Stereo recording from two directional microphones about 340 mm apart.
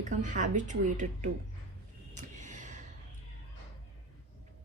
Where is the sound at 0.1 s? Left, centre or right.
Right.